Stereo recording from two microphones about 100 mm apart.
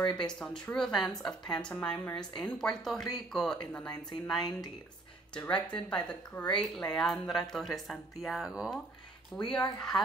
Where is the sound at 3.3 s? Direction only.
5° left (ahead or behind).